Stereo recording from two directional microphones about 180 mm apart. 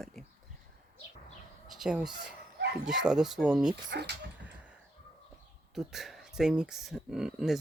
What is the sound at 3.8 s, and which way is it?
Speech, 70° right (ahead or behind).